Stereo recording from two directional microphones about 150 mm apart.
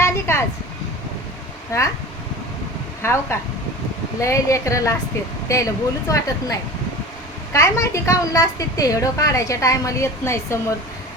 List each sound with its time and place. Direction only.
0.0 s vehicle: 15° left (ahead or behind)
3.0 s a woman's voice: 20° left (ahead or behind)